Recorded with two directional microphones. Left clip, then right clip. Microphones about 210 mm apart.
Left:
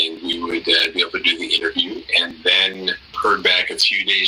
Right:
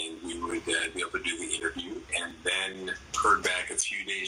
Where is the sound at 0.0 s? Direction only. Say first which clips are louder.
Left 14 dB; 50° left (ahead or behind).